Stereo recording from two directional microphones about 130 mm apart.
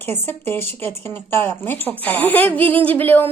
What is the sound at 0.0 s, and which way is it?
Speech, 15° left (ahead or behind).